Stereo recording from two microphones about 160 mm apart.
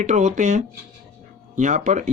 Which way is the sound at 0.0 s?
50° right (ahead or behind).